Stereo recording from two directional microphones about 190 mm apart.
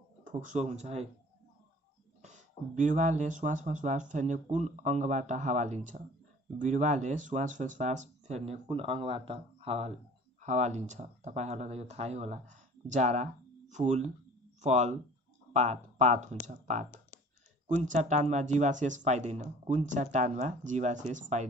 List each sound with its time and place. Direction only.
0.2 s speech: 45° right (ahead or behind)
2.2 s speech: 40° right (ahead or behind)